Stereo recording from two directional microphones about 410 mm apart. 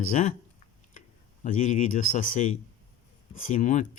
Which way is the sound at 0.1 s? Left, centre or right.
Centre.